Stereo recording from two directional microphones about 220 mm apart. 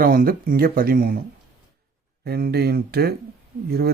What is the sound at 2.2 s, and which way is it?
Speech, 45° right (ahead or behind).